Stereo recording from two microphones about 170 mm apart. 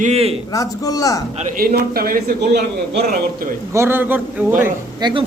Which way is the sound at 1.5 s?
60° right (ahead or behind).